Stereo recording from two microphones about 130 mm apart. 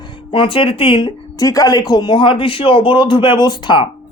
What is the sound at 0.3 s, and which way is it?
Speech, 45° left (ahead or behind).